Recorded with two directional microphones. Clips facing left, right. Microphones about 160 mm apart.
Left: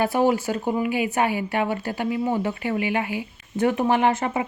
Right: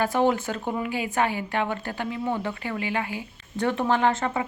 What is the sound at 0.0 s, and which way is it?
Speech, 10° left (ahead or behind).